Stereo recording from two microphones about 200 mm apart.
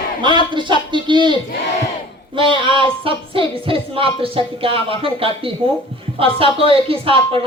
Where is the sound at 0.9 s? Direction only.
25° right (ahead or behind).